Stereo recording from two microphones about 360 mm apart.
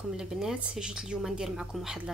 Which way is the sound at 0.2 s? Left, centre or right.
Centre.